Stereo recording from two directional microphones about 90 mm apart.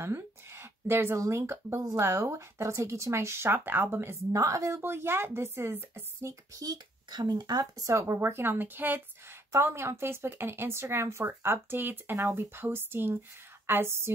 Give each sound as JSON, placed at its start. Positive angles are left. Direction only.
{"t": 0.0, "sound": "a sound", "side_deg": -30}
{"t": 1.2, "sound": "speech", "side_deg": -30}
{"t": 8.0, "sound": "speech", "side_deg": -25}